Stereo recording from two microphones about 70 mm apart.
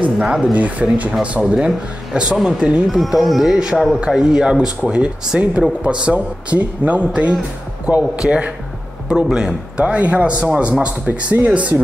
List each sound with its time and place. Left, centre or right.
0.2 s speech: centre
0.6 s a man's voice: right